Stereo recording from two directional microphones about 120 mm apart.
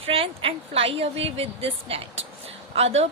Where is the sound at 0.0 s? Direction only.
50° right (ahead or behind).